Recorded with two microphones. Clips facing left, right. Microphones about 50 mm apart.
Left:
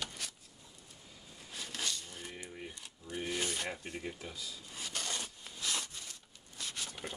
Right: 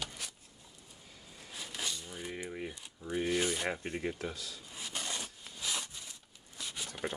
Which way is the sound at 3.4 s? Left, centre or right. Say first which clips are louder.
Right 4 dB; centre.